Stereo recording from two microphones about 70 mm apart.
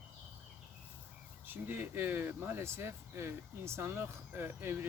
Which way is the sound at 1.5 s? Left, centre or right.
Right.